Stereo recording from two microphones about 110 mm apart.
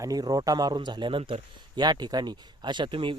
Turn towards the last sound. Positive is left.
turn(degrees=-50)  # may be behind; listen again after turning